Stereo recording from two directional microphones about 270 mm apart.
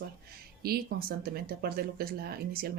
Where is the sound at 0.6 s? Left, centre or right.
Right.